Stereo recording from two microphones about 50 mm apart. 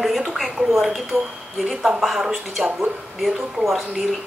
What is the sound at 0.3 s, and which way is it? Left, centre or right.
A woman's voice, centre.